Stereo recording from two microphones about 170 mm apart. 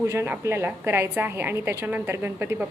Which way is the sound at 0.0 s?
15° right (ahead or behind).